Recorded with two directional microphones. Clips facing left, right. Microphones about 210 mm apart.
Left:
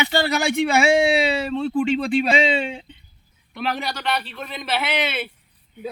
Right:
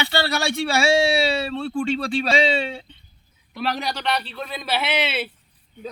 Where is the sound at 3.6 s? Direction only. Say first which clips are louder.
Even; 5° left (ahead or behind).